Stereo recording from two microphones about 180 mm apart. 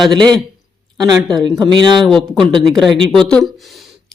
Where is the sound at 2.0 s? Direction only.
Centre (ahead or behind).